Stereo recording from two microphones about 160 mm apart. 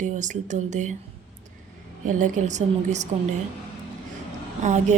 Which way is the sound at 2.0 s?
50° right (ahead or behind).